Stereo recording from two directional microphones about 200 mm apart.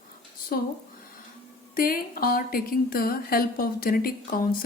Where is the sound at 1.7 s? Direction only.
45° left (ahead or behind).